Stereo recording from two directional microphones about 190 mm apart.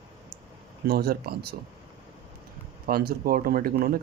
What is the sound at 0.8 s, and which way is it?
Speech, 55° right (ahead or behind).